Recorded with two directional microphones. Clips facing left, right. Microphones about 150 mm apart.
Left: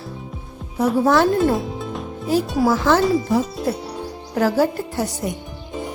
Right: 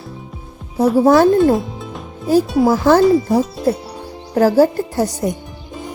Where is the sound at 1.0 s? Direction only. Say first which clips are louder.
Right 5 dB; 40° right (ahead or behind).